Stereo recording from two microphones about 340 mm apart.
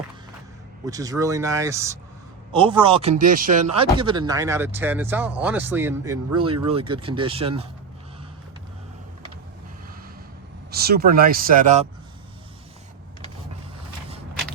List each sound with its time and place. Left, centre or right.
0.9 s a man's voice: centre
10.7 s speech: right